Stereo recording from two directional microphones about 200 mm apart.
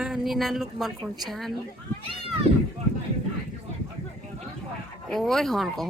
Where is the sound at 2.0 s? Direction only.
30° right (ahead or behind).